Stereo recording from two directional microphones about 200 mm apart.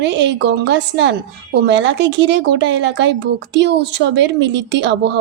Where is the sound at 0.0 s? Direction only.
60° right (ahead or behind).